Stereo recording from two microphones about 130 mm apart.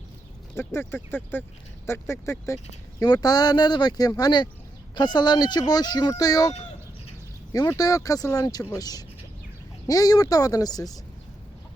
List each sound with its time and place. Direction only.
0.5 s speech: 20° left (ahead or behind)
3.0 s speech: 30° left (ahead or behind)
7.5 s speech: 30° left (ahead or behind)